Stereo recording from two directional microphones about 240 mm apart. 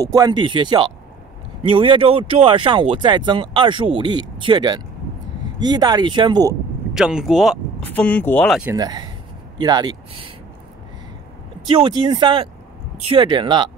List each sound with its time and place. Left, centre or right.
0.0 s speech: centre
6.9 s speech: centre
8.7 s speech: centre
11.7 s speech: centre